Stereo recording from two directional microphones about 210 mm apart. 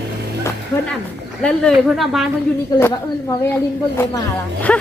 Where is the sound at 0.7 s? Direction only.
15° left (ahead or behind).